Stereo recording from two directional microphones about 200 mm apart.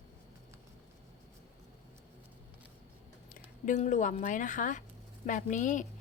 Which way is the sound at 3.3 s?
40° left (ahead or behind).